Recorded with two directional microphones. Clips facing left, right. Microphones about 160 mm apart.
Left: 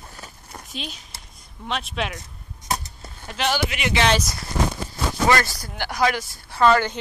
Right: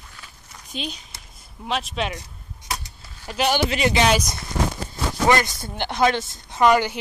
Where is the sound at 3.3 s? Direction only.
10° right (ahead or behind).